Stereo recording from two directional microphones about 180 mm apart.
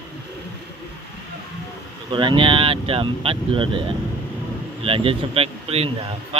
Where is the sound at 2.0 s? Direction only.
25° right (ahead or behind).